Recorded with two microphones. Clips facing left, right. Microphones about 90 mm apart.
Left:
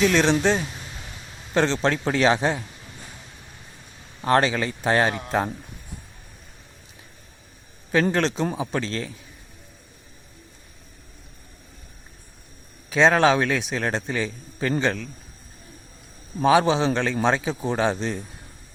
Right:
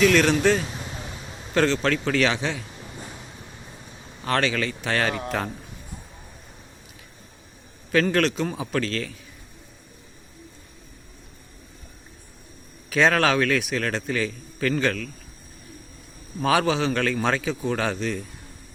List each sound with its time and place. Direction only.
0.0 s a man's voice: 25° left (ahead or behind); by 2.6 s 40° left (ahead or behind)
4.2 s a man's voice: 30° left (ahead or behind)
8.1 s speech: 30° left (ahead or behind)
8.5 s a man's voice: 20° left (ahead or behind)
12.9 s a man's voice: 20° left (ahead or behind)
16.4 s a man's voice: 25° left (ahead or behind)